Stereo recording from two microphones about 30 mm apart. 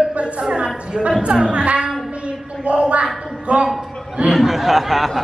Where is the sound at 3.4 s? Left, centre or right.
Right.